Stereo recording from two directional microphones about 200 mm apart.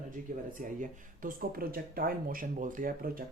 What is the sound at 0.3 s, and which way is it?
Speech, 45° right (ahead or behind).